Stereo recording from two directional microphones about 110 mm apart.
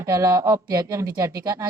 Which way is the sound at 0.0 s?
25° right (ahead or behind).